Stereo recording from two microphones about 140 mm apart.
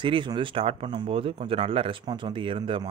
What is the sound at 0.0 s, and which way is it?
Speech, 35° right (ahead or behind).